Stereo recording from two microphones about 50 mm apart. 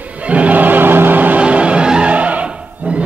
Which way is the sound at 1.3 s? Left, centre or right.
Right.